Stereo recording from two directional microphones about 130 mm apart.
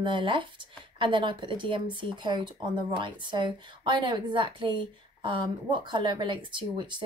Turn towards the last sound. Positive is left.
turn(degrees=-35)  # may be behind; listen again after turning